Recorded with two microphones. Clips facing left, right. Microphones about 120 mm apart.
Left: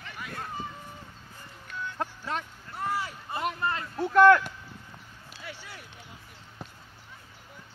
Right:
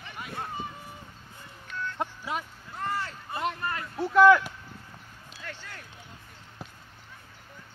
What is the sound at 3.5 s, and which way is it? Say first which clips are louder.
Speech: left 3 dB; 25° left (ahead or behind).